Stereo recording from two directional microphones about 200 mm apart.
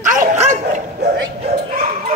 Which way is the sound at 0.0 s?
40° right (ahead or behind).